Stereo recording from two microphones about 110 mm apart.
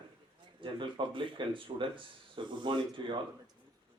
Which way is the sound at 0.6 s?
50° right (ahead or behind).